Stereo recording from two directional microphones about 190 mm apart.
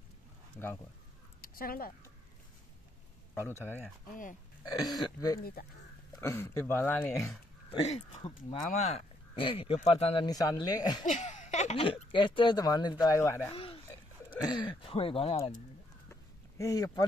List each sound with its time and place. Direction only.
1.5 s speech: 50° left (ahead or behind)
3.3 s speech: 15° left (ahead or behind)
5.4 s speech: 50° left (ahead or behind)
6.2 s speech: 10° left (ahead or behind)
7.7 s speech: 35° left (ahead or behind)
10.2 s speech: 20° left (ahead or behind)
11.1 s speech: 40° left (ahead or behind); by 13.4 s 15° left (ahead or behind)
13.5 s a sound: 30° left (ahead or behind)
14.7 s speech: 30° left (ahead or behind)
16.1 s a sound: 15° left (ahead or behind)